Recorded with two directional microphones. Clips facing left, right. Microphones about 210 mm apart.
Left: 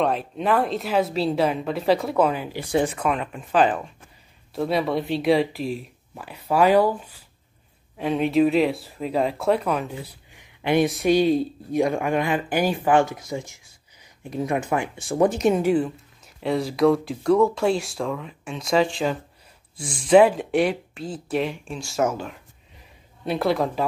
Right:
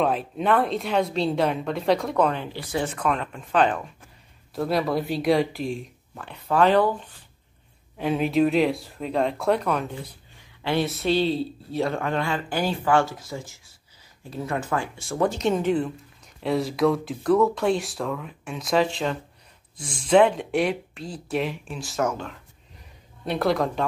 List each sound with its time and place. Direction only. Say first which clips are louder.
0.0 s speech: even; centre (ahead or behind)
10.3 s speech: left 4 dB; 20° left (ahead or behind)